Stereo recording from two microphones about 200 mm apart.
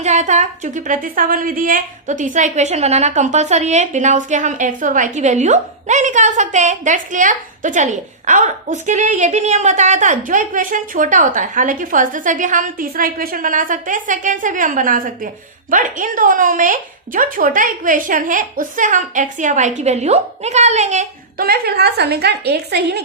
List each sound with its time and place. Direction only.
0.0 s a woman's voice: 35° right (ahead or behind); by 23.0 s 55° right (ahead or behind)